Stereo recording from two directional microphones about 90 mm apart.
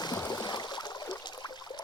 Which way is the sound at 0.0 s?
50° left (ahead or behind).